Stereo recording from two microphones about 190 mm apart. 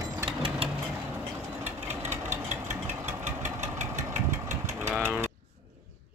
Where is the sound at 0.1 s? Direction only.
20° right (ahead or behind).